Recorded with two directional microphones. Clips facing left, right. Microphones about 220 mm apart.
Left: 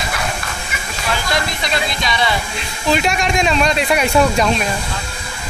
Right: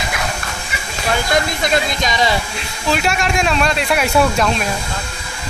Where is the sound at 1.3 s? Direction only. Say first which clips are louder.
Right 4 dB; 45° right (ahead or behind).